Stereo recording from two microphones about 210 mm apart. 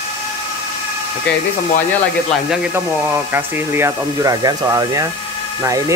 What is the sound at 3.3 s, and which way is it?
Speech, 10° right (ahead or behind).